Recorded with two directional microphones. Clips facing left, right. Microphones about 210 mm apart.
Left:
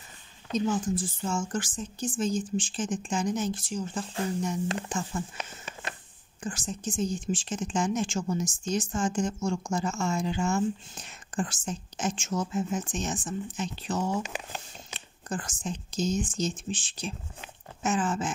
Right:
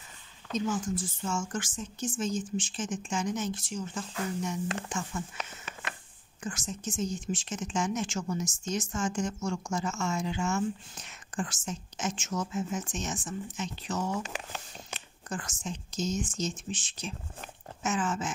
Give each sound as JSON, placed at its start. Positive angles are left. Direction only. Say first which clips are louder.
{"t": 0.5, "sound": "speech", "louder": "left 3 dB", "side_deg": 35}
{"t": 6.4, "sound": "speech", "louder": "left 2 dB", "side_deg": 30}
{"t": 15.2, "sound": "speech", "louder": "left 3 dB", "side_deg": 30}